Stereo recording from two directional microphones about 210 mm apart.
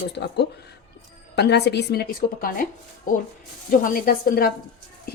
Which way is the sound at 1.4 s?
55° left (ahead or behind).